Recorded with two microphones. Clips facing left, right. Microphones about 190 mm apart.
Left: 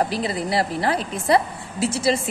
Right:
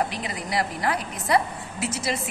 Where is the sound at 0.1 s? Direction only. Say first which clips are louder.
Left 6 dB; 35° left (ahead or behind).